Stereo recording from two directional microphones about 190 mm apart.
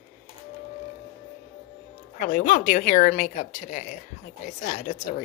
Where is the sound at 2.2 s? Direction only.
45° left (ahead or behind).